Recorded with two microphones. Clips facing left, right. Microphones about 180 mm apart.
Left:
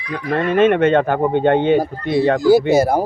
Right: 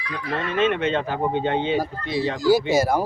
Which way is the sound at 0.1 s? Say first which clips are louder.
Left 8 dB; 55° left (ahead or behind).